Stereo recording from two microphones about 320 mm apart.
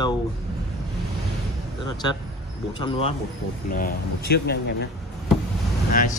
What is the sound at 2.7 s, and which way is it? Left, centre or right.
Speech, centre.